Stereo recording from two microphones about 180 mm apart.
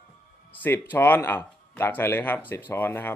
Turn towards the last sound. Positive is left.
turn(degrees=10)  # may be behind; listen again after turning